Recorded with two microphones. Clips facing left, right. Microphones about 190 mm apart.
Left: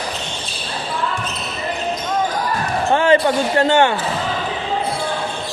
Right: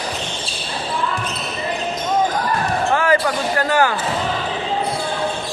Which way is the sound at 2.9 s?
25° left (ahead or behind).